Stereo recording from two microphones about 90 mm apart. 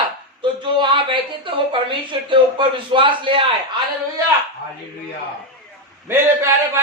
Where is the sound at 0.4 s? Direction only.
60° right (ahead or behind).